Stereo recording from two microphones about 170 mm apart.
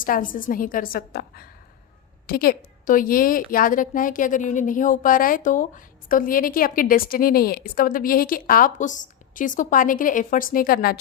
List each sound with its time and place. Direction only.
0.0 s a woman's voice: 55° left (ahead or behind)